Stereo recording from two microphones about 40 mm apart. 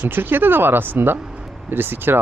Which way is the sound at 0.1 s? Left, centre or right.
Right.